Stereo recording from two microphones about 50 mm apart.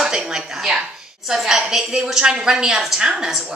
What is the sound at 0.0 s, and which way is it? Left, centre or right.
Dishes, centre.